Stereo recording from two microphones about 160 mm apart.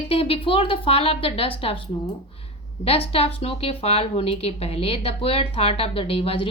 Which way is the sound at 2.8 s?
35° left (ahead or behind).